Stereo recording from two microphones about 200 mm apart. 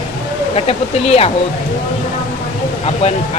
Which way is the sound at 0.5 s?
30° left (ahead or behind).